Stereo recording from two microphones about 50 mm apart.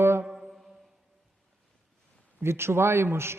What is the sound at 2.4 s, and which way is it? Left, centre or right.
Speech, right.